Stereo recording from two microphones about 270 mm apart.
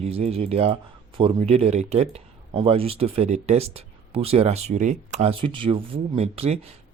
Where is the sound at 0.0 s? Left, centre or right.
Right.